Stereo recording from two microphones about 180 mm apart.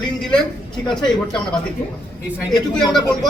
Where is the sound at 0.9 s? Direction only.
5° left (ahead or behind).